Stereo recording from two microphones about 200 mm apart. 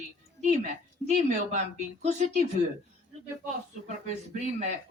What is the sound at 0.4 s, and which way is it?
A woman's voice, 35° right (ahead or behind).